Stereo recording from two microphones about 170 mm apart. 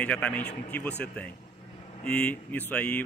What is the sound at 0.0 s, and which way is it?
A man's voice, 5° left (ahead or behind).